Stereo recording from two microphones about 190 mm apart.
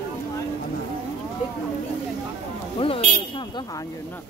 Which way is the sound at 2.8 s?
25° left (ahead or behind).